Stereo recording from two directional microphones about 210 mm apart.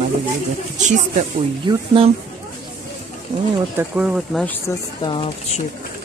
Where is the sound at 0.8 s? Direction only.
35° right (ahead or behind).